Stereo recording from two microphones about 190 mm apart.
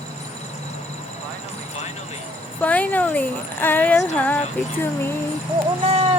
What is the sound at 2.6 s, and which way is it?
Speech, 5° left (ahead or behind).